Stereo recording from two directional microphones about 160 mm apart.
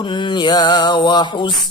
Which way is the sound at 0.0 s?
30° left (ahead or behind).